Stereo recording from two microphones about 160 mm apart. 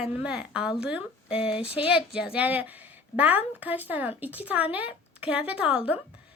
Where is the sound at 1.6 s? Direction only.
35° left (ahead or behind).